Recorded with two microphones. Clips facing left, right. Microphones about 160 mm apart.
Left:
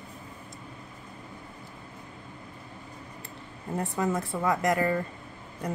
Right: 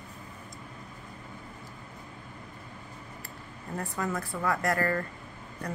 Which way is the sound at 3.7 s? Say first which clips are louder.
Left 4 dB; 20° left (ahead or behind).